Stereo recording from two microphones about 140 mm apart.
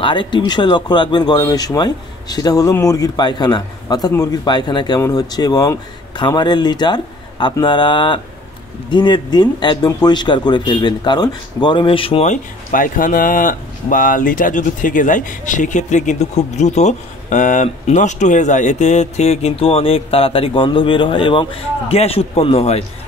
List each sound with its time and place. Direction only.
0.0 s speech: 35° left (ahead or behind)
12.3 s speech: 75° left (ahead or behind); by 22.8 s 45° left (ahead or behind)